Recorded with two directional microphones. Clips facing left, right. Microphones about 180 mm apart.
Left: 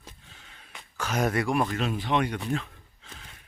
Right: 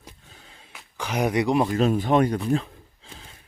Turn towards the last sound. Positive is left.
turn(degrees=-30)  # may be behind; listen again after turning